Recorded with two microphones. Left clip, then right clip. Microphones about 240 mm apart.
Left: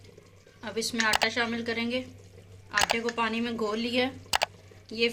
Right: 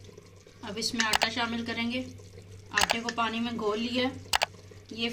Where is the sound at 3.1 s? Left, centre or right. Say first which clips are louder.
Left 1 dB; left.